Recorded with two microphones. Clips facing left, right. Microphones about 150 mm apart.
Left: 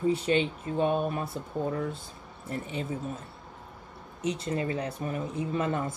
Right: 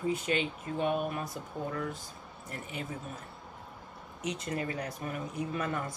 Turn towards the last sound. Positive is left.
turn(degrees=25)  # may be behind; listen again after turning